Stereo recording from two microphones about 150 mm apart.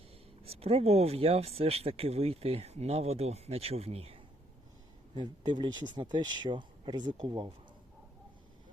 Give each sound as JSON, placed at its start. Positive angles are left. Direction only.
{"t": 0.4, "sound": "speech", "side_deg": -40}
{"t": 5.1, "sound": "speech", "side_deg": -30}